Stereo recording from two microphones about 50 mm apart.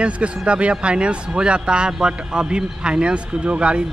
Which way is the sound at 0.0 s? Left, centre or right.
Right.